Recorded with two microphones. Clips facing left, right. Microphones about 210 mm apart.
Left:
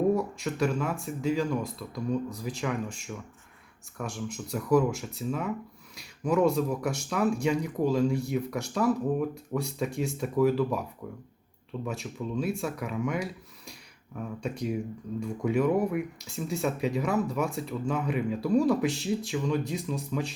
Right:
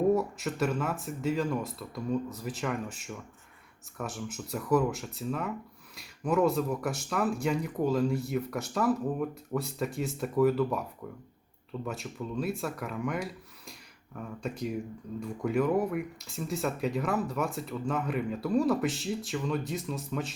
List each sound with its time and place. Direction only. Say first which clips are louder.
0.1 s speech: even; 5° right (ahead or behind)
11.9 s speech: left 3 dB; centre (ahead or behind)